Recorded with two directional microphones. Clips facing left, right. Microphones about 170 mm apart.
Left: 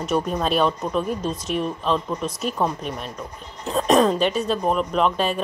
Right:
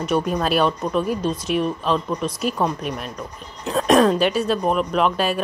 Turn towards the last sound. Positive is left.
turn(degrees=-5)  # may be behind; listen again after turning